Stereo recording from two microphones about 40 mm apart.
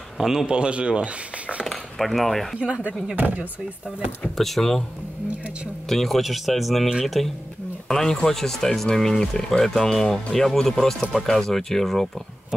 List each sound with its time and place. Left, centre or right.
0.2 s speech: centre
0.5 s speech: right
1.6 s speech: centre
3.2 s speech: right
4.4 s speech: centre
5.9 s speech: centre